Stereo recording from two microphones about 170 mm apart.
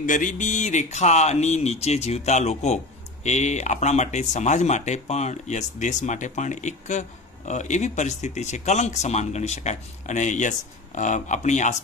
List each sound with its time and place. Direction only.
0.0 s speech: 50° left (ahead or behind)